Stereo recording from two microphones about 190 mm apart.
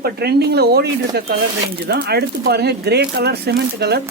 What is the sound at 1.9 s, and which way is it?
Speech, 55° right (ahead or behind).